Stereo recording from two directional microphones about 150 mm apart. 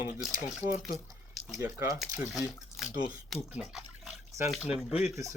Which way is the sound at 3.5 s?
5° right (ahead or behind).